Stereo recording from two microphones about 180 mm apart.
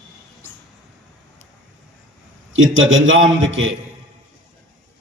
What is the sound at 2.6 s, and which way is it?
A man's voice, 90° right.